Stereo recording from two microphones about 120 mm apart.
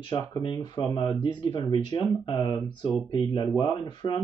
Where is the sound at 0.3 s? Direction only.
40° left (ahead or behind).